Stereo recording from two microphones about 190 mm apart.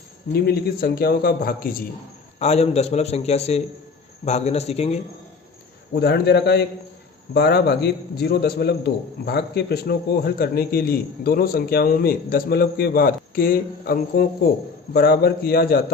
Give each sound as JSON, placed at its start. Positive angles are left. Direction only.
{"t": 0.3, "sound": "a man's voice", "side_deg": 55}
{"t": 2.4, "sound": "a man's voice", "side_deg": 35}
{"t": 5.9, "sound": "a man's voice", "side_deg": 60}